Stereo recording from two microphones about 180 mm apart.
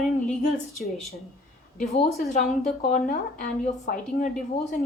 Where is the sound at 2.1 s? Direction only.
50° left (ahead or behind).